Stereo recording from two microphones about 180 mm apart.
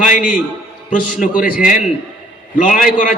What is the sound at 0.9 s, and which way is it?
Speech, 45° left (ahead or behind).